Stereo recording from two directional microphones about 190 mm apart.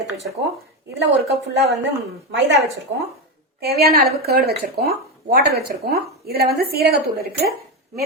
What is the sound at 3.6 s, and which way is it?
Speech, 55° right (ahead or behind).